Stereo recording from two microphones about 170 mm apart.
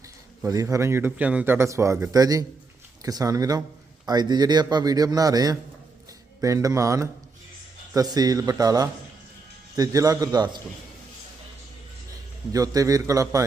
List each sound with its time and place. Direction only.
0.4 s a man's voice: 20° right (ahead or behind)
12.5 s speech: 20° right (ahead or behind)